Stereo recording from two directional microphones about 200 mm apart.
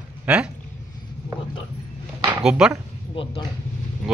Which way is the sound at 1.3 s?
15° right (ahead or behind).